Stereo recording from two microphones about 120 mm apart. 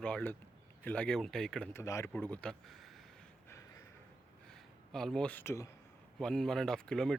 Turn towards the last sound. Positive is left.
turn(degrees=5)  # may be behind; listen again after turning